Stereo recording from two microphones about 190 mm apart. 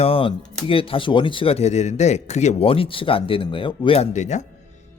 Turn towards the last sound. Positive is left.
turn(degrees=40)  # may be behind; listen again after turning